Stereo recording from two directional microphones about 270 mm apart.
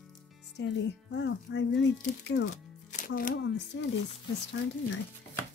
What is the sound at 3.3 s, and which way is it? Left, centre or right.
Speech, left.